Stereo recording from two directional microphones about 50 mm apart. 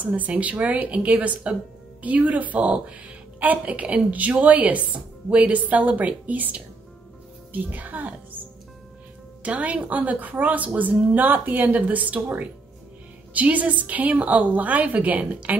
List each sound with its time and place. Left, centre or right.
0.0 s a woman's voice: right
9.4 s a woman's voice: right